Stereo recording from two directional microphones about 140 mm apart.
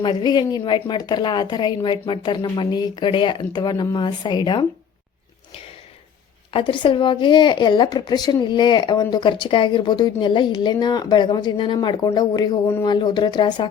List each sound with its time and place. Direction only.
0.0 s speech: 30° left (ahead or behind)
6.5 s speech: 40° left (ahead or behind)